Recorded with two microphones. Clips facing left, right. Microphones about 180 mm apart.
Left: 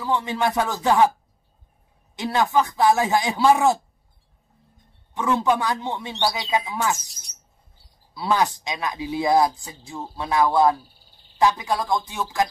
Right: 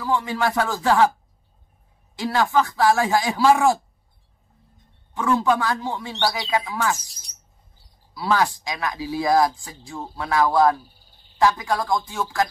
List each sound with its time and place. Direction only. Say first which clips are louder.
0.0 s speech: even; 20° left (ahead or behind)
2.1 s speech: even; 20° left (ahead or behind)
5.1 s speech: right 1 dB; 20° left (ahead or behind)
8.1 s speech: even; 20° left (ahead or behind)